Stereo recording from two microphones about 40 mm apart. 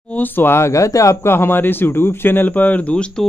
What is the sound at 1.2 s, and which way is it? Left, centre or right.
Speech, left.